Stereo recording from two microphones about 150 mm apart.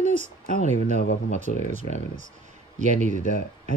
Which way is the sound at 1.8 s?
65° left (ahead or behind).